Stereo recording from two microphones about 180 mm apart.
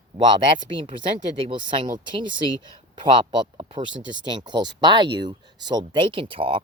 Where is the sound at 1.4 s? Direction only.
30° right (ahead or behind).